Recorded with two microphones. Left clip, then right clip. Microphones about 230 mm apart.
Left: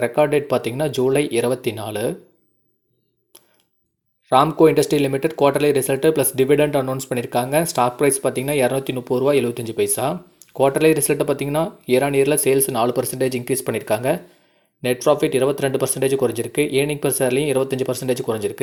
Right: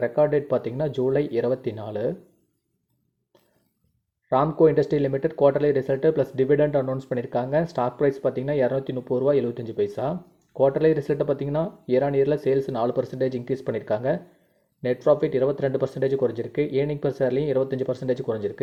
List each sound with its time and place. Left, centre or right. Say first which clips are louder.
0.0 s speech: left 4 dB; centre
4.6 s speech: left 4 dB; centre